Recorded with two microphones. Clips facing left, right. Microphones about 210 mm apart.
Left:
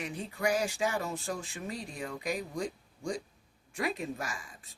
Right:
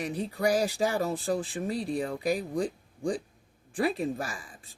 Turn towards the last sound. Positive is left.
turn(degrees=-30)  # may be behind; listen again after turning